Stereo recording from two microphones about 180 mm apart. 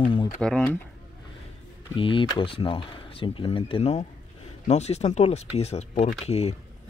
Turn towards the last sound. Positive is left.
turn(degrees=35)  # may be behind; listen again after turning